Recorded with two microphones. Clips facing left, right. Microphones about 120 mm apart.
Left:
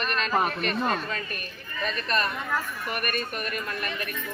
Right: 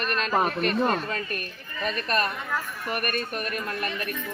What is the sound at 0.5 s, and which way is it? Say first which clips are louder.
Speech: right 3 dB; 40° right (ahead or behind).